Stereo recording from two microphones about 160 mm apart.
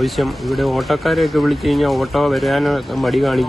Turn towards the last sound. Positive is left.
turn(degrees=0)  # may be behind; listen again after turning